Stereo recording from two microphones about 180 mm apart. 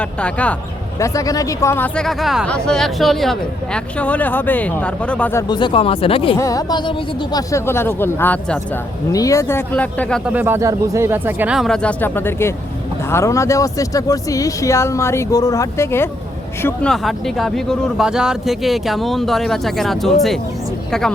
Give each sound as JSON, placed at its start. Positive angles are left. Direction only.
{"t": 0.0, "sound": "speech", "side_deg": 5}
{"t": 0.9, "sound": "speech", "side_deg": 15}
{"t": 6.3, "sound": "speech", "side_deg": 20}
{"t": 10.2, "sound": "speech", "side_deg": -10}
{"t": 16.6, "sound": "speech", "side_deg": 5}